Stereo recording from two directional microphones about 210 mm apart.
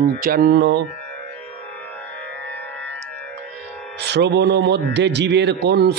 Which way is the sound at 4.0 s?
55° right (ahead or behind).